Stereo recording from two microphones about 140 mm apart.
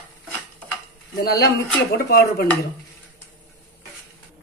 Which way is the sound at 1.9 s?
90° left.